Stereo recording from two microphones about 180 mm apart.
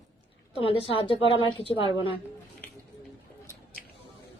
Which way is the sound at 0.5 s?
30° left (ahead or behind).